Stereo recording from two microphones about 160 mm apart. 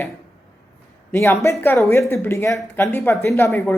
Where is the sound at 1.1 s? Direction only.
15° left (ahead or behind).